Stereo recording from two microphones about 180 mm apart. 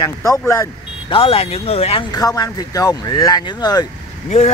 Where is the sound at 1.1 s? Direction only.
30° left (ahead or behind).